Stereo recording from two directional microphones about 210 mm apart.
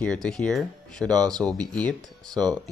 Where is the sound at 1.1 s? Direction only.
20° right (ahead or behind).